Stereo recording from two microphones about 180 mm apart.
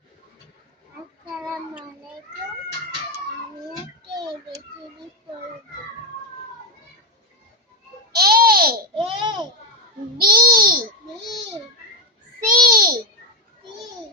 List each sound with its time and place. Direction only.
8.1 s babbling: 60° right (ahead or behind)
9.0 s babbling: 25° right (ahead or behind)
10.2 s babbling: 55° right (ahead or behind)
12.5 s babbling: 50° right (ahead or behind)